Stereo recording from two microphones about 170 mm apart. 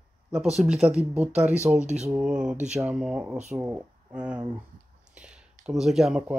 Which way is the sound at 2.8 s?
5° right (ahead or behind).